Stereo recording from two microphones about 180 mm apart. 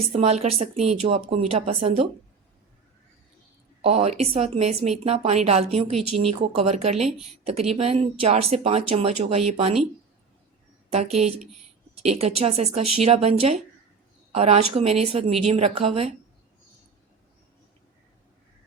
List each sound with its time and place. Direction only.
0.1 s speech: 35° right (ahead or behind)
3.8 s speech: 35° right (ahead or behind)
10.9 s speech: 35° right (ahead or behind)